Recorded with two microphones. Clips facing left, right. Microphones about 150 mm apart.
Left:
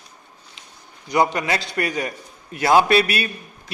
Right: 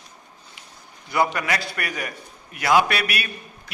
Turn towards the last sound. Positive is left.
turn(degrees=25)  # may be behind; listen again after turning